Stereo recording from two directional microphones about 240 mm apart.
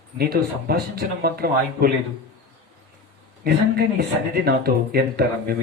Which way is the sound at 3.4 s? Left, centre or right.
Right.